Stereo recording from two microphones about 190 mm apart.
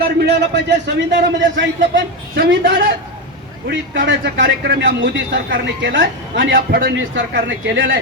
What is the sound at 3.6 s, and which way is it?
A man's voice, 65° right (ahead or behind).